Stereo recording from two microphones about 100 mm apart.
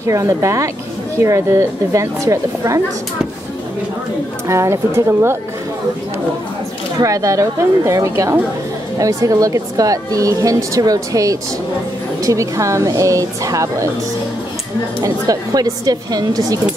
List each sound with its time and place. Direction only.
0.0 s a woman's voice: 35° right (ahead or behind)
4.5 s speech: 30° right (ahead or behind)
7.0 s a woman's voice: 35° right (ahead or behind)
15.0 s a woman's voice: 35° right (ahead or behind)